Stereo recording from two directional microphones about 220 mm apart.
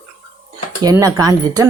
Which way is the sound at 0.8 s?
15° right (ahead or behind).